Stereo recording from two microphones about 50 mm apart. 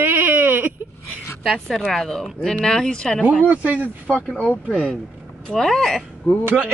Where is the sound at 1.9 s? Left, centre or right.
Centre.